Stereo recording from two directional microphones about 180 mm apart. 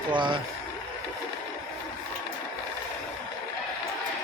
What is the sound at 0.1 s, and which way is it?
Speech, 25° right (ahead or behind).